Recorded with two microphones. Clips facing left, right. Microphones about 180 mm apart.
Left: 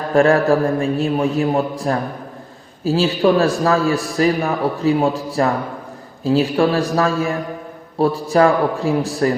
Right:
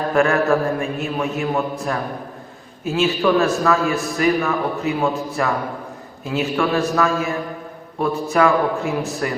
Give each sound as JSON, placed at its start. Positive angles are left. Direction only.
{"t": 0.1, "sound": "a man's voice", "side_deg": 35}